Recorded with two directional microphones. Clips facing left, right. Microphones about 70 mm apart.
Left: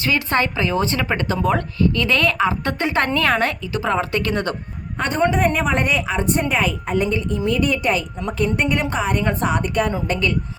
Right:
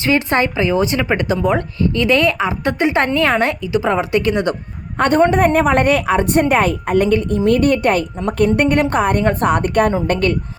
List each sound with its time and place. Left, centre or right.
0.0 s a woman's voice: right
4.9 s a man's voice: right